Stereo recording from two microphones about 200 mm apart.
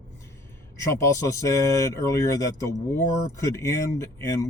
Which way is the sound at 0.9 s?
15° left (ahead or behind).